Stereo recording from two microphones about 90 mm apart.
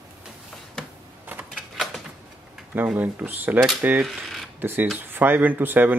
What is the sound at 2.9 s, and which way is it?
Speech, 20° right (ahead or behind).